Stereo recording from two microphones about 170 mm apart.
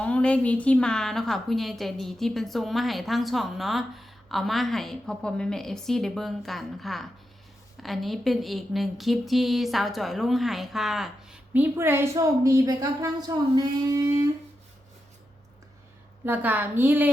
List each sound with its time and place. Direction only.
0.0 s a woman's voice: 5° left (ahead or behind); by 13.4 s 20° right (ahead or behind)
13.9 s a sound: 20° right (ahead or behind)
16.2 s a woman's voice: 10° right (ahead or behind)